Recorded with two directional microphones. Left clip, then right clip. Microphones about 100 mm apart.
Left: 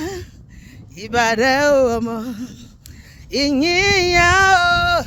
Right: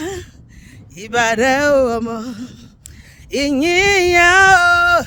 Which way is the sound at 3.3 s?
55° right (ahead or behind).